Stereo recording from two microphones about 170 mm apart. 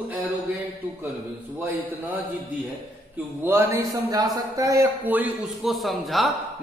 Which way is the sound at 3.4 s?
15° right (ahead or behind).